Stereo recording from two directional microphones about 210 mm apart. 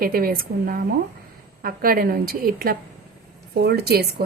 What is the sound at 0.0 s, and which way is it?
A woman's voice, 45° right (ahead or behind).